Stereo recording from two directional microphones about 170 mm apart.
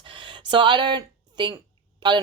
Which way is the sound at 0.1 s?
30° right (ahead or behind).